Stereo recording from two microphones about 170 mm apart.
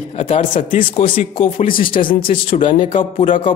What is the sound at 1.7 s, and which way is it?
Speech, 55° left (ahead or behind).